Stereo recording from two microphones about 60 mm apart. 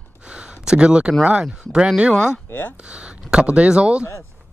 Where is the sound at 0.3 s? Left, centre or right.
Centre.